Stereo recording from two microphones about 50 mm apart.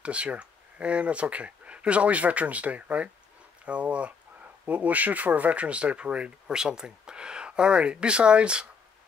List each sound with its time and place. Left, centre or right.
0.0 s speech: right